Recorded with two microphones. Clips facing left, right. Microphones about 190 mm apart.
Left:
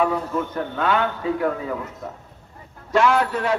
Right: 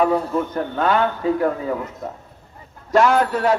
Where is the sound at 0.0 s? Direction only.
35° right (ahead or behind).